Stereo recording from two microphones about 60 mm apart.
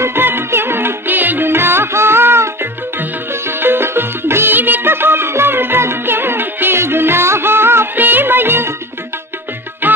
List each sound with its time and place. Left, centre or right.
0.0 s music: right
9.8 s music: right